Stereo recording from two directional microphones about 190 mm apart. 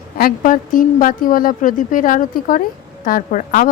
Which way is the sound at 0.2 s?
50° left (ahead or behind).